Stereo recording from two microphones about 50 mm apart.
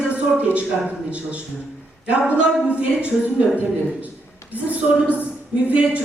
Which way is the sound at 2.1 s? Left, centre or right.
Right.